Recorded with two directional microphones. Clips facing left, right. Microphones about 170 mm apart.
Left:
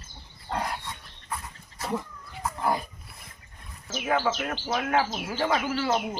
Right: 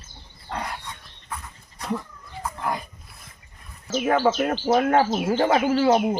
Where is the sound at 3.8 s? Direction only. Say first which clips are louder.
Right 6 dB; 45° right (ahead or behind).